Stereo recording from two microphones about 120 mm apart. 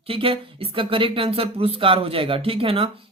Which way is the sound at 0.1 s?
50° right (ahead or behind).